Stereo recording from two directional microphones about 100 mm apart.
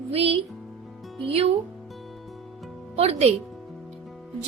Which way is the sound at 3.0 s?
90° right.